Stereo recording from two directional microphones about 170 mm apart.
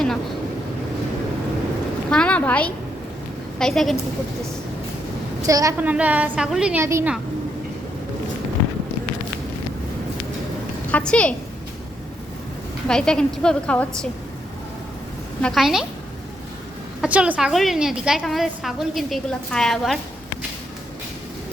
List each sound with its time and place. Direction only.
2.0 s a woman's voice: 5° left (ahead or behind)
5.5 s a woman's voice: 20° right (ahead or behind)
5.8 s a woman's voice: 10° right (ahead or behind)
6.8 s a woman's voice: 15° right (ahead or behind)
10.9 s a woman's voice: 5° left (ahead or behind)
12.9 s a woman's voice: 5° left (ahead or behind)
15.4 s a woman's voice: 5° left (ahead or behind)
17.0 s a woman's voice: 5° right (ahead or behind)